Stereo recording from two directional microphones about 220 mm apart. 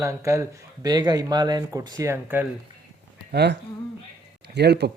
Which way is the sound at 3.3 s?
50° right (ahead or behind).